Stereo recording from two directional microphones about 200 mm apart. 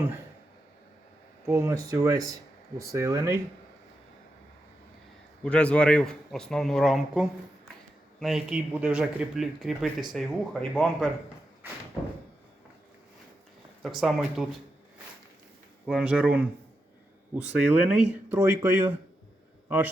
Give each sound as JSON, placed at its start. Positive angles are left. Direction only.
{"t": 1.5, "sound": "speech", "side_deg": -15}
{"t": 5.4, "sound": "speech", "side_deg": 5}
{"t": 13.8, "sound": "speech", "side_deg": 0}
{"t": 15.9, "sound": "a man's voice", "side_deg": -5}